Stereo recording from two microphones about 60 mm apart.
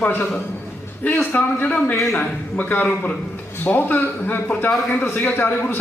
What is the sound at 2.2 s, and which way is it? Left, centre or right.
A man's voice, centre.